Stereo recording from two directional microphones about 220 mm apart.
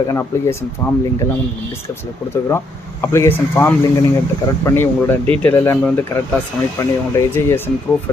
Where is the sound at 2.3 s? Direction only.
10° left (ahead or behind).